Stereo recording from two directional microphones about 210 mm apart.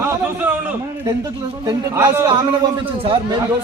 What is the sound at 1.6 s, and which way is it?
A man's voice, 15° right (ahead or behind).